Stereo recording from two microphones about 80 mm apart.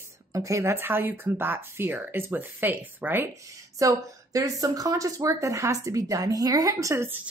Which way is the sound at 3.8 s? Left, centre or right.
Right.